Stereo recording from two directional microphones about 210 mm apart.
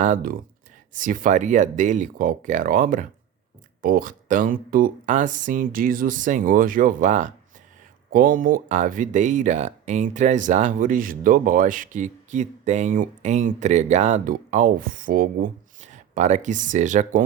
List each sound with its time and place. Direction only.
0.0 s speech: 40° right (ahead or behind)